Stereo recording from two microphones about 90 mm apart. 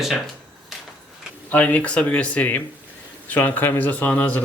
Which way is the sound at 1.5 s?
20° left (ahead or behind).